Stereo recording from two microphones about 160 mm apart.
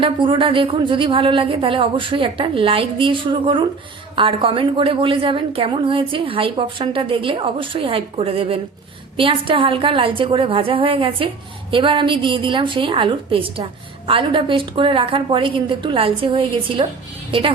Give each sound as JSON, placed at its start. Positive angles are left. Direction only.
{"t": 0.0, "sound": "a woman's voice", "side_deg": -30}